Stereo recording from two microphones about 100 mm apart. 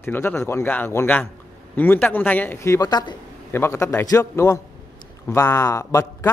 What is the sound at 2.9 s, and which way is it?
Speech, 45° left (ahead or behind).